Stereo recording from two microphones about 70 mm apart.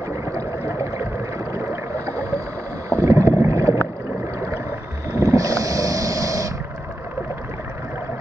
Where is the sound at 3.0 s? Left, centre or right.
Right.